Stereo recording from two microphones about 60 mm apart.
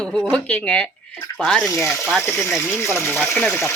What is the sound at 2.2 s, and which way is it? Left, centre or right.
Speech, left.